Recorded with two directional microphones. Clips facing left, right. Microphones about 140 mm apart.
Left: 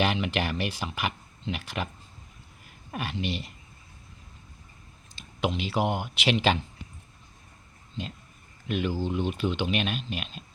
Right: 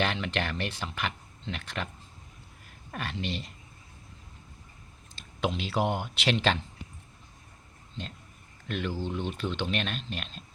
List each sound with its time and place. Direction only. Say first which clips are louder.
0.0 s speech: left 3 dB; 10° left (ahead or behind)
5.1 s speech: left 2 dB; centre (ahead or behind)
8.6 s speech: left 4 dB; 5° left (ahead or behind)